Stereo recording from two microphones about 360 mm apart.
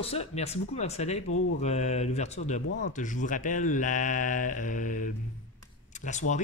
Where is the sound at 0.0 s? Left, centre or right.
Centre.